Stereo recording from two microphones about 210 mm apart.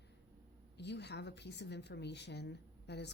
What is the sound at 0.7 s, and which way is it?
A woman's voice, 55° left (ahead or behind).